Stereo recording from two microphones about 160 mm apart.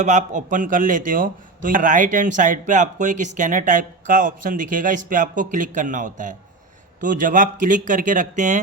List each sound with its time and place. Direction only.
0.0 s a man's voice: 50° right (ahead or behind)